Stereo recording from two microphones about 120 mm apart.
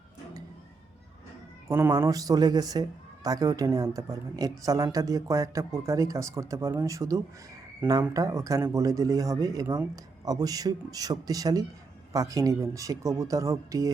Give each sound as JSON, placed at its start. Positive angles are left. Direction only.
{"t": 1.6, "sound": "speech", "side_deg": -25}